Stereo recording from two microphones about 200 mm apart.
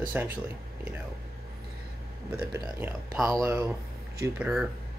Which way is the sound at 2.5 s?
10° right (ahead or behind).